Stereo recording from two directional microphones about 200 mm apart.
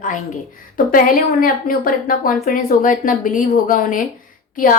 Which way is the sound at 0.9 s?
45° left (ahead or behind).